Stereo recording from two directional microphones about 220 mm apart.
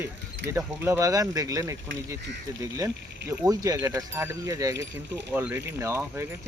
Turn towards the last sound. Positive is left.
turn(degrees=-10)  # may be behind; listen again after turning